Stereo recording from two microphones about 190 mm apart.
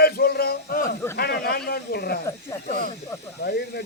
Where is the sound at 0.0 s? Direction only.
55° left (ahead or behind).